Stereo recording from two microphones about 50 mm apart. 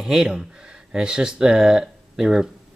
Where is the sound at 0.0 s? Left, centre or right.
Centre.